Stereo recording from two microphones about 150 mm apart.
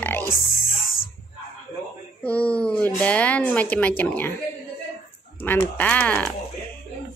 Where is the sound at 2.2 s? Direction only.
10° left (ahead or behind).